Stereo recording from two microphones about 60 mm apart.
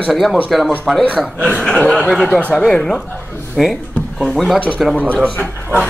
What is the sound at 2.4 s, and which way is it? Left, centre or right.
A man's voice, left.